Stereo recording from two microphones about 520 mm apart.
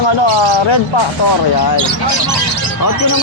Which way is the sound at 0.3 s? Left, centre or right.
Left.